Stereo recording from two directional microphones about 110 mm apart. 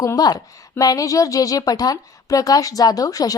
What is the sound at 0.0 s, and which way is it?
A woman's voice, 35° left (ahead or behind).